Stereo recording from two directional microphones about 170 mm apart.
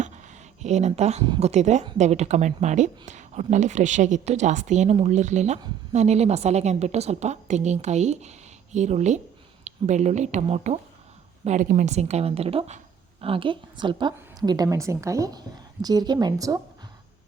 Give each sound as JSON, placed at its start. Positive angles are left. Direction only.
{"t": 0.6, "sound": "a woman's voice", "side_deg": -40}